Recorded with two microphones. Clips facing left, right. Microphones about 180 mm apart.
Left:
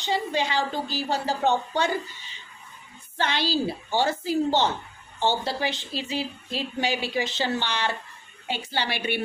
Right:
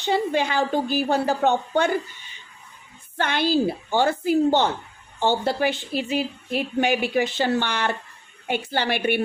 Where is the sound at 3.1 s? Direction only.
55° right (ahead or behind).